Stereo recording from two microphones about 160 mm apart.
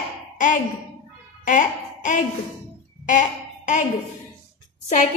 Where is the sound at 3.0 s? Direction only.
50° left (ahead or behind).